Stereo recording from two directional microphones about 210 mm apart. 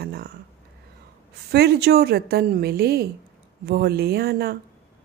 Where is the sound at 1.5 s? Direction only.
50° right (ahead or behind).